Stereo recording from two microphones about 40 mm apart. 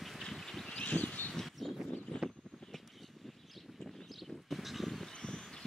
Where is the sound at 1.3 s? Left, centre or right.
Centre.